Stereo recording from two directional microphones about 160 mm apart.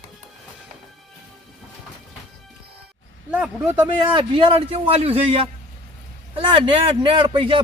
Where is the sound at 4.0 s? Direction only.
30° right (ahead or behind).